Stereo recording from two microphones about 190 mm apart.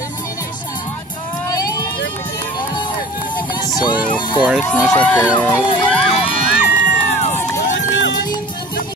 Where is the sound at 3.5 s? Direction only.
20° left (ahead or behind).